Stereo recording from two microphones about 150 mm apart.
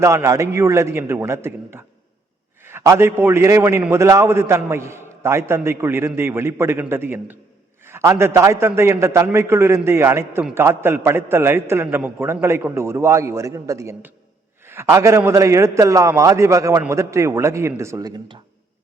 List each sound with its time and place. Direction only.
0.0 s a man's voice: 20° right (ahead or behind)